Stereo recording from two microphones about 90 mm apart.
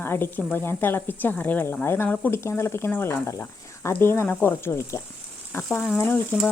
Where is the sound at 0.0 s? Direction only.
25° left (ahead or behind).